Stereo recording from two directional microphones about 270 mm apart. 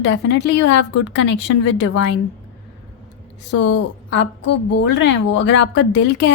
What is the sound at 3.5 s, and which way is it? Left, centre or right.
A woman's voice, left.